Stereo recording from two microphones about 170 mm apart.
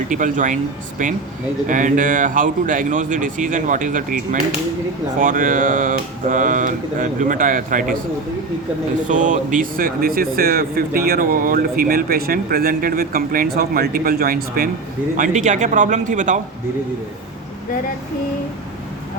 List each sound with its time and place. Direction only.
0.1 s speech: 50° right (ahead or behind)
9.0 s speech: 45° right (ahead or behind)